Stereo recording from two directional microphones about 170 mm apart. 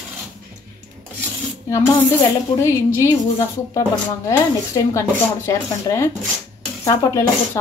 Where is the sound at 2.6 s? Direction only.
15° left (ahead or behind).